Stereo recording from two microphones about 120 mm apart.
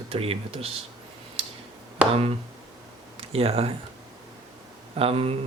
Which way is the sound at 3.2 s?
55° right (ahead or behind).